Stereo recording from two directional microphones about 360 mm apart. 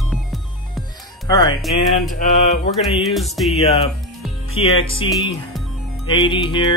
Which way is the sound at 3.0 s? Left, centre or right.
Centre.